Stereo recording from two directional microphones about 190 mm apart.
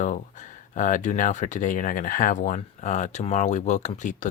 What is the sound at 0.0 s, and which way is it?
Speech, 40° left (ahead or behind).